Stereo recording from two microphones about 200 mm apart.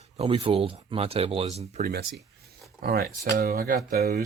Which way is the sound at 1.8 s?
55° right (ahead or behind).